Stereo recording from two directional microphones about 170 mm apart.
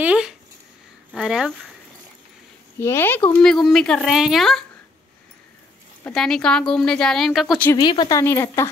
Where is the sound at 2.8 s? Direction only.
15° left (ahead or behind).